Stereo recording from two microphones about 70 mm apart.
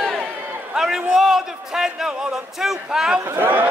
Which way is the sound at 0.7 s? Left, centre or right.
Centre.